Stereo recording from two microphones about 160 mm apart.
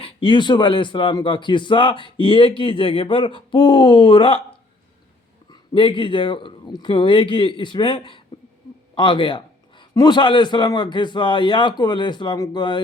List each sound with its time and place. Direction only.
0.0 s a man's voice: 30° left (ahead or behind)
5.5 s a man's voice: 30° left (ahead or behind)